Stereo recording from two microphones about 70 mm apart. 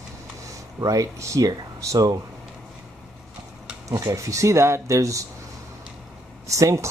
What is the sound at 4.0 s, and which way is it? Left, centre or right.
Speech, right.